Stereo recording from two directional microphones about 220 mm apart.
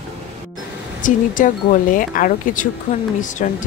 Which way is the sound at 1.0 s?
35° left (ahead or behind).